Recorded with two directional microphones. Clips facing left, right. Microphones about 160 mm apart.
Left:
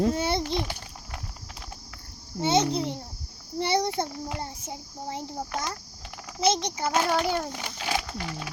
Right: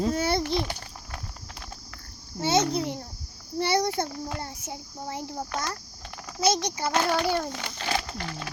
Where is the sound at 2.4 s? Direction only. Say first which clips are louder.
Even; 15° left (ahead or behind).